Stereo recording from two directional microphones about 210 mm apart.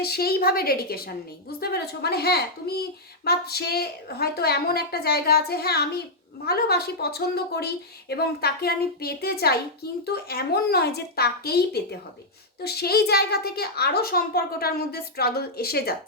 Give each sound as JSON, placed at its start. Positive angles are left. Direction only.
{"t": 0.0, "sound": "a woman's voice", "side_deg": 50}